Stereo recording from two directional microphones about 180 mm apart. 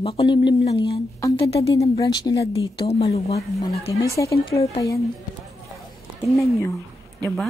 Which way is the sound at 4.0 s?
15° left (ahead or behind).